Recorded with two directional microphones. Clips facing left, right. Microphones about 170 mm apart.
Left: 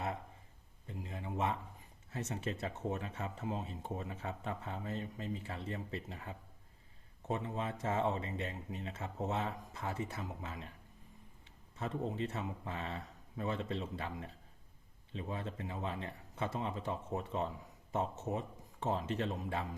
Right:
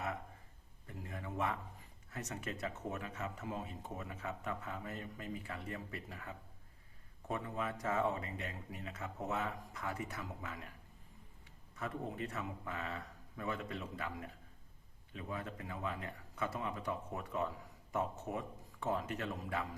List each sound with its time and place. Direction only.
0.9 s a sound: 20° left (ahead or behind)
2.0 s speech: 25° left (ahead or behind)
11.8 s speech: 25° left (ahead or behind)